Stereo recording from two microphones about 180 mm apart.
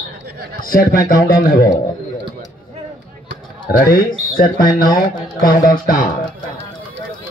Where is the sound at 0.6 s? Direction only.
50° left (ahead or behind).